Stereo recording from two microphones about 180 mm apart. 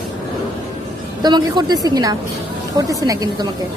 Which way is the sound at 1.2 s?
25° right (ahead or behind).